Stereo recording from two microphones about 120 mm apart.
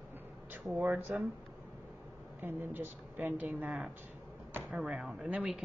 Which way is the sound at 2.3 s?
15° right (ahead or behind).